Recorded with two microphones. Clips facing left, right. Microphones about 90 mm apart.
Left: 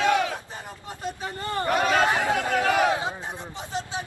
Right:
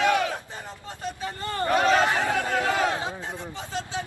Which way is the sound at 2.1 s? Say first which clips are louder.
Left 1 dB; 15° left (ahead or behind).